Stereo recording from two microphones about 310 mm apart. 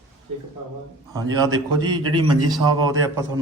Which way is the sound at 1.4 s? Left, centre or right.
Centre.